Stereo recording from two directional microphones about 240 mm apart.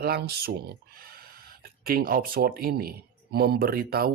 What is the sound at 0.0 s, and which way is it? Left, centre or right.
Speech, right.